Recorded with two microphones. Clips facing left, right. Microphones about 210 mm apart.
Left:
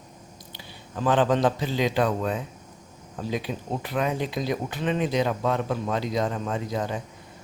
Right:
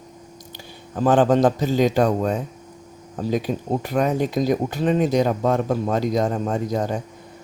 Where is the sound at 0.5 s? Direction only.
45° right (ahead or behind).